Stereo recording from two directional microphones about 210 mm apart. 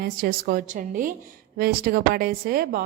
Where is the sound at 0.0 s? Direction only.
45° right (ahead or behind).